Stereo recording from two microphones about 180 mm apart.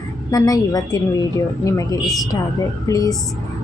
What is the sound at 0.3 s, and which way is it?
Speech, 20° left (ahead or behind).